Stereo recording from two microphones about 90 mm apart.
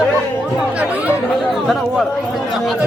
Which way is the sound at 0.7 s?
15° right (ahead or behind).